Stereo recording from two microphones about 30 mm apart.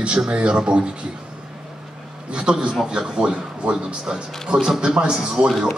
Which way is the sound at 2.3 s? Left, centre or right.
Right.